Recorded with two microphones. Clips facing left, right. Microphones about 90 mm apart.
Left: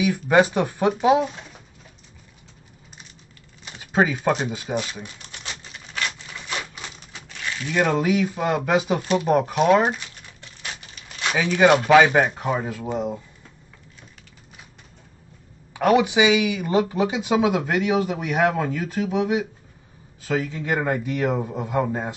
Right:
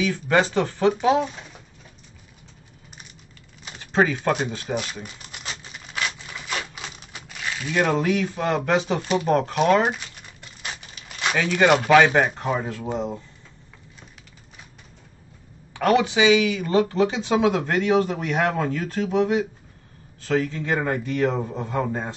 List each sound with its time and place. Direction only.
0.0 s speech: 10° left (ahead or behind)
3.6 s crumpling: 5° left (ahead or behind)
11.3 s speech: 5° left (ahead or behind)
15.7 s speech: 10° left (ahead or behind)